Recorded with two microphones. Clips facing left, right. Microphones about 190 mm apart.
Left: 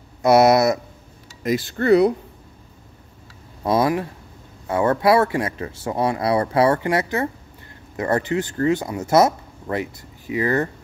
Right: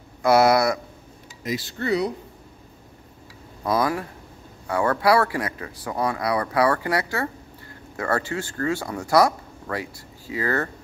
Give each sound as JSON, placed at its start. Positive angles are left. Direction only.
{"t": 0.2, "sound": "speech", "side_deg": 20}
{"t": 1.4, "sound": "speech", "side_deg": 50}
{"t": 3.6, "sound": "speech", "side_deg": 25}